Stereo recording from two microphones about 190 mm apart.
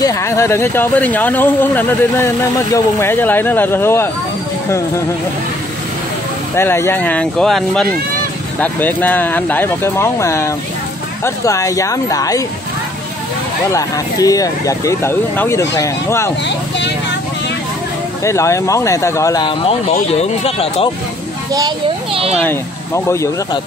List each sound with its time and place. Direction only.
0.0 s speech: 15° left (ahead or behind)
6.5 s speech: 15° left (ahead or behind)
13.7 s speech: 15° left (ahead or behind)
16.4 s speech: 65° left (ahead or behind)
18.2 s speech: 15° left (ahead or behind); by 20.9 s 30° left (ahead or behind)
21.5 s a child's voice: 25° right (ahead or behind)
23.0 s speech: 15° left (ahead or behind)